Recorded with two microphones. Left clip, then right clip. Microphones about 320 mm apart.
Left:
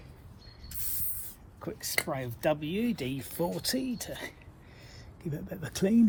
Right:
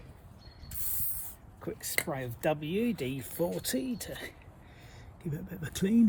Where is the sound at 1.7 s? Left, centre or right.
Centre.